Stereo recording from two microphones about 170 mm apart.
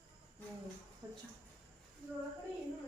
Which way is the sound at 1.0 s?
20° right (ahead or behind).